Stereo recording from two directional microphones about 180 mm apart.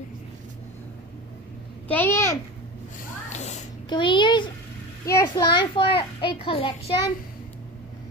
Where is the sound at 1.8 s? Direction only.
10° left (ahead or behind).